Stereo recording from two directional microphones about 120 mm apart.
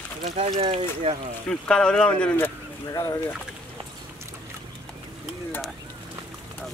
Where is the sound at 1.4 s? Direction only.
5° left (ahead or behind).